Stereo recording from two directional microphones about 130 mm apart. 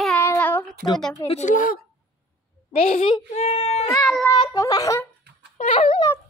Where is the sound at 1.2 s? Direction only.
50° left (ahead or behind).